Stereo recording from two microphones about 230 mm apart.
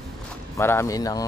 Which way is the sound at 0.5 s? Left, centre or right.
Centre.